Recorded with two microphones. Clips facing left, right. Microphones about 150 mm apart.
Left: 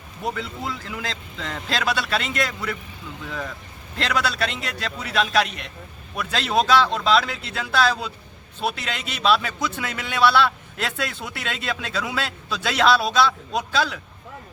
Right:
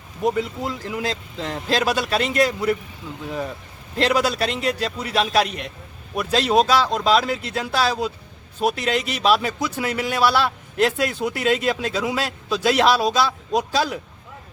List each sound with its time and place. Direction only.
0.4 s a man's voice: 40° right (ahead or behind)
3.2 s speech: 30° right (ahead or behind)
3.9 s a man's voice: 40° right (ahead or behind)